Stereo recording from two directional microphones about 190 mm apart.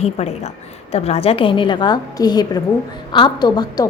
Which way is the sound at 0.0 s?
35° left (ahead or behind).